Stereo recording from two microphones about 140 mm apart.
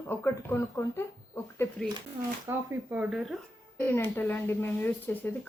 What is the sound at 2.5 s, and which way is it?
Speech, 15° right (ahead or behind).